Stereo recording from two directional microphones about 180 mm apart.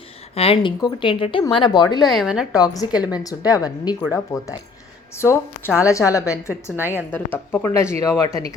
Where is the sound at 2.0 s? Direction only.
Centre (ahead or behind).